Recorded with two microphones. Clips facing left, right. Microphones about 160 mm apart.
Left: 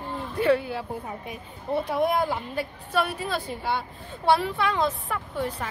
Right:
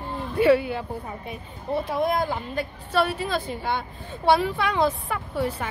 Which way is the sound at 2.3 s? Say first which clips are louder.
Right 1 dB; 10° left (ahead or behind).